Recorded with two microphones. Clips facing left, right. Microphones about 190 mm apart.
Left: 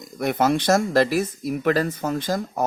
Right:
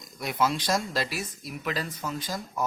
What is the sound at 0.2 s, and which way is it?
Speech, 55° left (ahead or behind).